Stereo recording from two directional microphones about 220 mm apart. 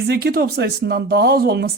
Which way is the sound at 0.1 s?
45° right (ahead or behind).